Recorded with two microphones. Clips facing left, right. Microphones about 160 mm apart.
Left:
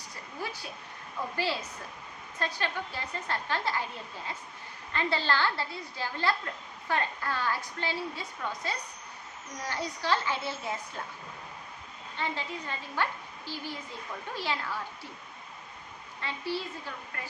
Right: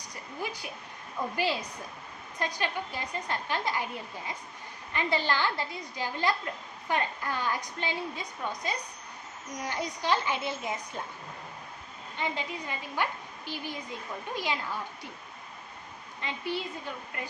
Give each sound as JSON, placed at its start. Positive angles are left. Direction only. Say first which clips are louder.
{"t": 1.2, "sound": "a woman's voice", "louder": "right 3 dB", "side_deg": -15}
{"t": 2.4, "sound": "a woman's voice", "louder": "right 1 dB", "side_deg": -15}
{"t": 12.1, "sound": "a woman's voice", "louder": "right 1 dB", "side_deg": -15}
{"t": 16.2, "sound": "a woman's voice", "louder": "even", "side_deg": -20}